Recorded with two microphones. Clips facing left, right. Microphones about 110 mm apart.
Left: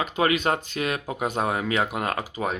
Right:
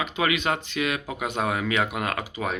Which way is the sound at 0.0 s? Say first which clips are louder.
Left 2 dB; 40° left (ahead or behind).